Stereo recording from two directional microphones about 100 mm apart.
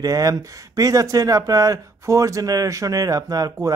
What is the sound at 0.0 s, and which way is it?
Speech, 35° right (ahead or behind).